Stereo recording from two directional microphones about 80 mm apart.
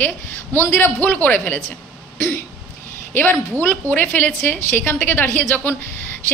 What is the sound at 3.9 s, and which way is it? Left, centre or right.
A woman's voice, left.